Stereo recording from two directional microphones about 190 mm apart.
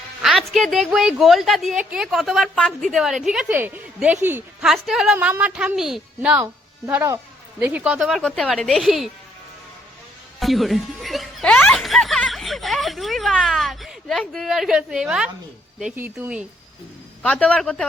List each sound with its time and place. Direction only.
0.2 s a woman's voice: centre (ahead or behind)
6.4 s a woman's voice: 15° right (ahead or behind)
10.4 s speech: centre (ahead or behind)
17.2 s a woman's voice: 5° left (ahead or behind)